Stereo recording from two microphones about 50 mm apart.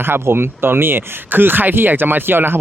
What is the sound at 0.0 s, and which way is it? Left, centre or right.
Speech, right.